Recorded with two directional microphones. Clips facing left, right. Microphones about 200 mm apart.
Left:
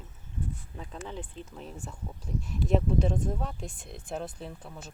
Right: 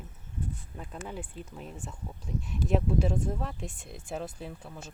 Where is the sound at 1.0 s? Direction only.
10° right (ahead or behind).